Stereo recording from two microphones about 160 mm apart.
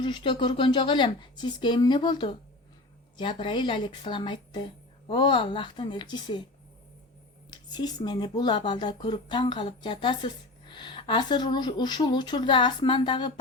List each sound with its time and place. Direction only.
0.0 s speech: 30° left (ahead or behind)
7.5 s speech: 25° left (ahead or behind)